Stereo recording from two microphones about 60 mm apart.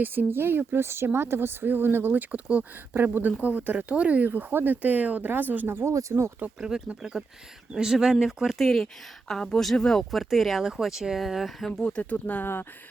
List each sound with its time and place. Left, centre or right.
0.0 s speech: right
2.3 s speech: right
5.6 s speech: right
5.9 s speech: right
6.6 s speech: centre
8.6 s speech: centre
11.8 s speech: left